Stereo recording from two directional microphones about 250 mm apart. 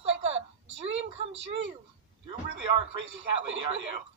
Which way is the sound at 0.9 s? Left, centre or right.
Right.